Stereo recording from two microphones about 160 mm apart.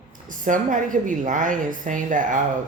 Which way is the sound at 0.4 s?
55° right (ahead or behind).